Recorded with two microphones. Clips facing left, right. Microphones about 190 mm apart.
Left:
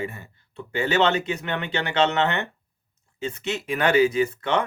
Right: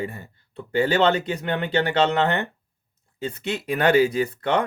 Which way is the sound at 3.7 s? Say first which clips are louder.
Right 1 dB; 35° right (ahead or behind).